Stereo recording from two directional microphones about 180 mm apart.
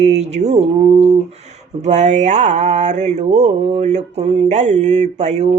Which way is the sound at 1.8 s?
40° right (ahead or behind).